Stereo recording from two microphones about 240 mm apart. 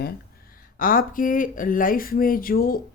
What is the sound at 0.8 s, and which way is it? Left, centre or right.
Speech, left.